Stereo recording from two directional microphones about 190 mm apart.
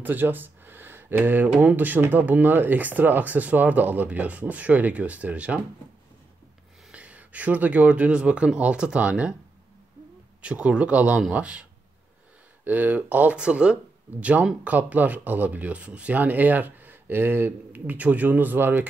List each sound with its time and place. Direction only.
0.0 s speech: 10° right (ahead or behind)
6.9 s speech: 5° right (ahead or behind)
10.4 s speech: 5° right (ahead or behind)
12.6 s speech: 10° right (ahead or behind)